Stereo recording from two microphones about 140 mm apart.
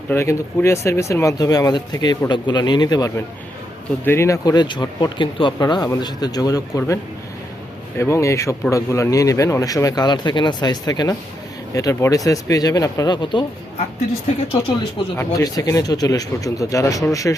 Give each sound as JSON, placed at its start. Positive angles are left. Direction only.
{"t": 0.1, "sound": "speech", "side_deg": 20}
{"t": 4.0, "sound": "speech", "side_deg": 20}
{"t": 15.3, "sound": "speech", "side_deg": 25}